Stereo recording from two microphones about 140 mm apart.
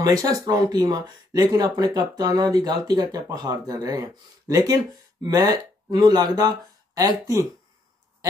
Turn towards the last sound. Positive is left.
turn(degrees=-25)  # may be behind; listen again after turning